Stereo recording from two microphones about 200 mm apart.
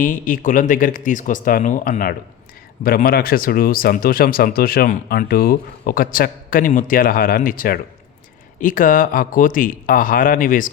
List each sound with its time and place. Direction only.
0.0 s speech: 40° left (ahead or behind)